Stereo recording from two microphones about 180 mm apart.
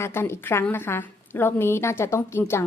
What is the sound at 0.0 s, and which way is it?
A woman's voice, 15° left (ahead or behind).